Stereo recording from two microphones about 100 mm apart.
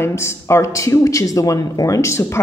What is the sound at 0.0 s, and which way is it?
Speech, 25° left (ahead or behind).